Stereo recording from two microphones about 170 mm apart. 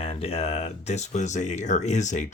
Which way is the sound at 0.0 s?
35° left (ahead or behind).